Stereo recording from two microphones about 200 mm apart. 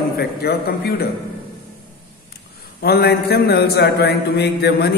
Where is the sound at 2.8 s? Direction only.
55° left (ahead or behind).